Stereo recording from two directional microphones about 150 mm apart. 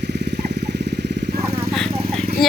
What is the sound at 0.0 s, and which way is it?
Vehicle, 90° right.